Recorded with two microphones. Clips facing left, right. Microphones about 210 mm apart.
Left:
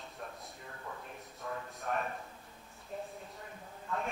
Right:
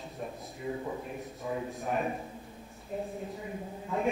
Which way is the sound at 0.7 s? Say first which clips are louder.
Right 13 dB; 20° right (ahead or behind).